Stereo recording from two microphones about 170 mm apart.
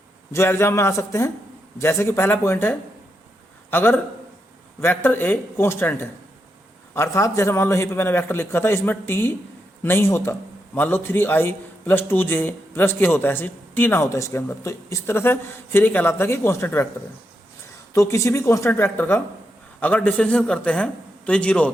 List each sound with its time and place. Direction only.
0.3 s a man's voice: 15° left (ahead or behind)
17.9 s a man's voice: 15° left (ahead or behind)